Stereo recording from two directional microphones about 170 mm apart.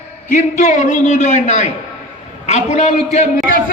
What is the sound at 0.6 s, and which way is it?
A man's voice, 45° left (ahead or behind).